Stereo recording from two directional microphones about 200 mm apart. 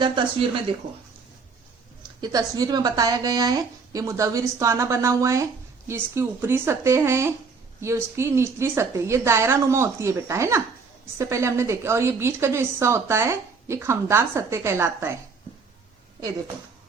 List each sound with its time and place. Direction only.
2.2 s a woman's voice: 20° right (ahead or behind)